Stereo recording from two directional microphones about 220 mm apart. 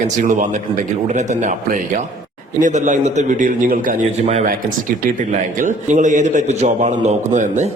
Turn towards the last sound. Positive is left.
turn(degrees=-35)  # may be behind; listen again after turning